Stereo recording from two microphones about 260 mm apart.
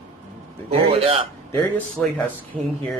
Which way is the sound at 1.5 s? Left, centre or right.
Centre.